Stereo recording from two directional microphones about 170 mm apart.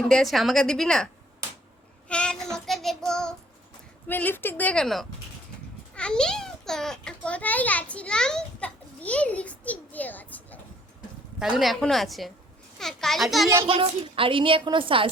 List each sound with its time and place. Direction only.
0.1 s a woman's voice: centre (ahead or behind)
2.0 s child singing: 5° left (ahead or behind)
4.1 s a woman's voice: 10° left (ahead or behind)
11.3 s a woman's voice: 5° right (ahead or behind)
13.7 s a woman's voice: 30° right (ahead or behind)